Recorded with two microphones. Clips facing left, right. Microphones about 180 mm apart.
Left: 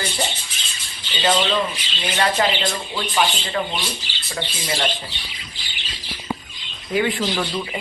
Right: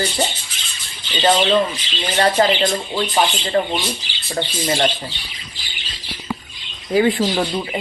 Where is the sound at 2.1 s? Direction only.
35° right (ahead or behind).